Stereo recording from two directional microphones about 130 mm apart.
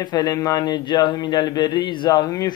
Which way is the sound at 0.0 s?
30° left (ahead or behind).